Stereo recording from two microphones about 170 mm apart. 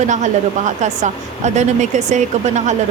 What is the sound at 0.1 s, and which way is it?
A woman's voice, 45° right (ahead or behind).